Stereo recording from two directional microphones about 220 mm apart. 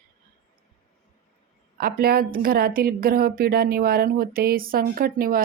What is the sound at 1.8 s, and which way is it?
A woman's voice, 45° right (ahead or behind).